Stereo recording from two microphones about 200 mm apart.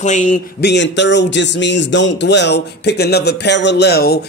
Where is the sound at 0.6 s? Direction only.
60° left (ahead or behind).